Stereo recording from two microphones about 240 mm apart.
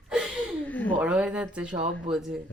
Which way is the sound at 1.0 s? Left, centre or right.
Centre.